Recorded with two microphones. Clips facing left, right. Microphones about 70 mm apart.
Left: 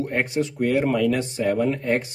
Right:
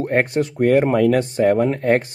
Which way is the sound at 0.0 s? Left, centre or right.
Right.